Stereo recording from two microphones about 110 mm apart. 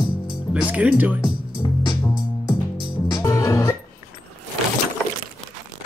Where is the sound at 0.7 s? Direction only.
15° right (ahead or behind).